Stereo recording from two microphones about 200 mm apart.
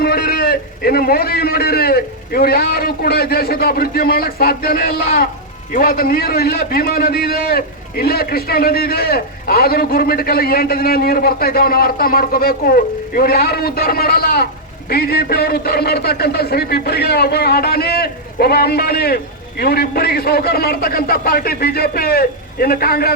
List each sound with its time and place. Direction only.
0.0 s a man's voice: 50° left (ahead or behind)